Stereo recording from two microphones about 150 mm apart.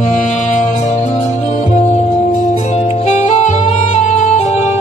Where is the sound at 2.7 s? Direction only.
45° left (ahead or behind).